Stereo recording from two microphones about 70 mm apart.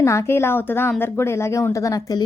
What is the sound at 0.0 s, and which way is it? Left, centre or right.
Speech, left.